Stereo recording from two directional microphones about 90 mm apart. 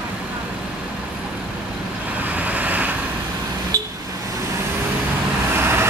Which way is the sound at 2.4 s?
20° right (ahead or behind).